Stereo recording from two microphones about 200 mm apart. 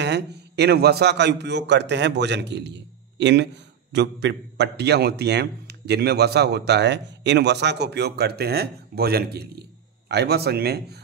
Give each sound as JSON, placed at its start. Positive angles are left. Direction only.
{"t": 0.0, "sound": "a man's voice", "side_deg": -55}